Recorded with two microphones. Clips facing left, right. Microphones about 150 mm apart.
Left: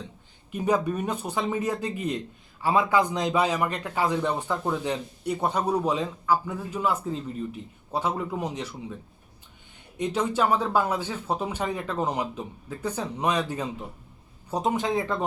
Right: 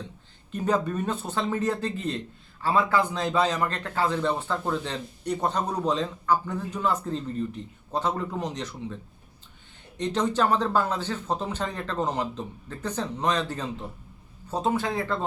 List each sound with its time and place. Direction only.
0.5 s speech: 10° left (ahead or behind)
10.0 s speech: 10° left (ahead or behind)